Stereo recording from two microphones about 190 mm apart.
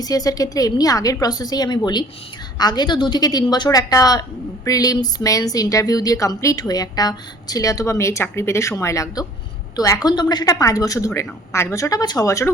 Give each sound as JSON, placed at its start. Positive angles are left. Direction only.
{"t": 0.0, "sound": "a woman's voice", "side_deg": 20}